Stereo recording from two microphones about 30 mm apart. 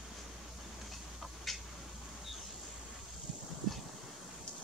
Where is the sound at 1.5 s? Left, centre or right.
Centre.